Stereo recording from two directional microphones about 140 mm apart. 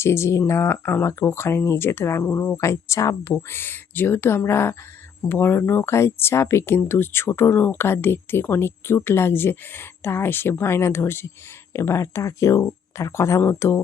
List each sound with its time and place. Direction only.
0.0 s speech: 20° left (ahead or behind)